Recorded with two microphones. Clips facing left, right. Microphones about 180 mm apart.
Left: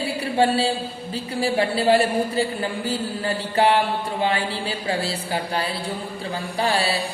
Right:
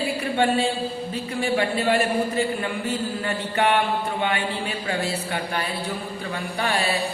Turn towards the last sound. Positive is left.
turn(degrees=30)  # may be behind; listen again after turning